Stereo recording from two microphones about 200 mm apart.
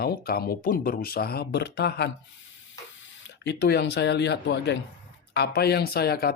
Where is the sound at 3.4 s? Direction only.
55° left (ahead or behind).